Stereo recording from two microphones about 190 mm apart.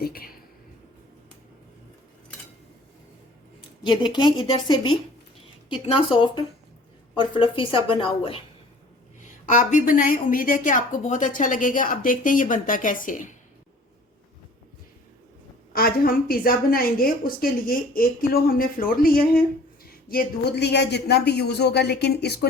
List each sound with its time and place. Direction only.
0.0 s a woman's voice: 50° left (ahead or behind)
3.8 s a woman's voice: 25° left (ahead or behind)
9.2 s a woman's voice: 40° left (ahead or behind)
15.7 s a woman's voice: 50° left (ahead or behind)